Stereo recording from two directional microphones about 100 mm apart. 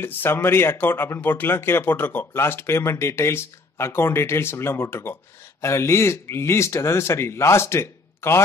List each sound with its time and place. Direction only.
0.0 s speech: 20° left (ahead or behind)